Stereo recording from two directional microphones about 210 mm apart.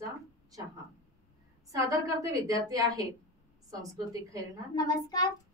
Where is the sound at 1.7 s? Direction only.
15° right (ahead or behind).